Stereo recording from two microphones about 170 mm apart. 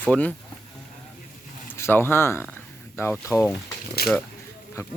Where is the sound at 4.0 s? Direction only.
65° left (ahead or behind).